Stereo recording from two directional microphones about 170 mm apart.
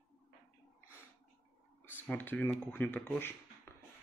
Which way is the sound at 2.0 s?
10° left (ahead or behind).